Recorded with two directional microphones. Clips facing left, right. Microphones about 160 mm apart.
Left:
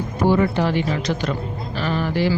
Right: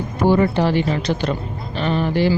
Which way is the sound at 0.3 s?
30° right (ahead or behind).